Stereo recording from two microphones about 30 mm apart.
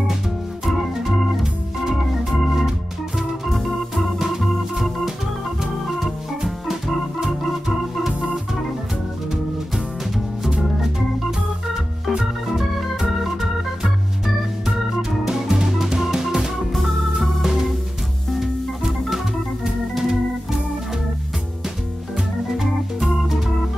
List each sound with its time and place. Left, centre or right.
1.4 s organ: centre
10.5 s organ: centre
15.0 s music: centre
16.7 s organ: centre
18.3 s organ: centre
22.6 s organ: centre